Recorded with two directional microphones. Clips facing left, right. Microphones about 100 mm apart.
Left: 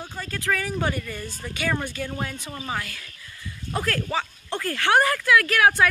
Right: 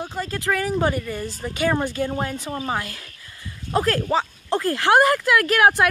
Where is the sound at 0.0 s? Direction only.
25° right (ahead or behind); by 1.2 s 10° right (ahead or behind).